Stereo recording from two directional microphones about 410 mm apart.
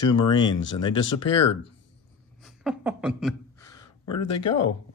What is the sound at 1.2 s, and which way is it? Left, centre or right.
Speech, left.